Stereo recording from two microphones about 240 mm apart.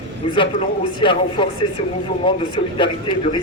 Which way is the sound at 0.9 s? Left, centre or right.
Left.